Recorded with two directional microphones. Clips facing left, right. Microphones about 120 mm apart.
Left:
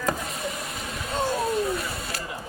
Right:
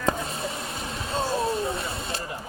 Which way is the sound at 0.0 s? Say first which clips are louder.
Right 1 dB; 30° right (ahead or behind).